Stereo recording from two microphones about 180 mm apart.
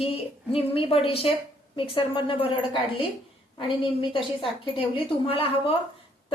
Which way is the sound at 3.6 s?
30° left (ahead or behind).